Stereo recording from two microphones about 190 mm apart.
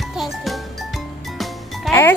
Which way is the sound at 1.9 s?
15° left (ahead or behind).